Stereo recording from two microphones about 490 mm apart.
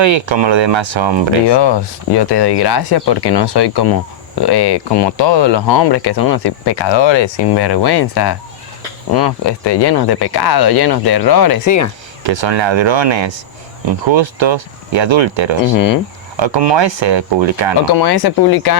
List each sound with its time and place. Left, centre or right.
0.0 s speech: right
1.5 s speech: left
12.3 s speech: right
15.7 s speech: left
16.4 s speech: right
17.9 s speech: left